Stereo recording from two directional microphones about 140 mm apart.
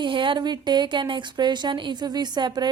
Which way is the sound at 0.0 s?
35° right (ahead or behind).